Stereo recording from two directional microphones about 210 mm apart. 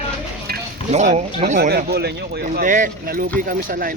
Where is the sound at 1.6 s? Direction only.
50° right (ahead or behind).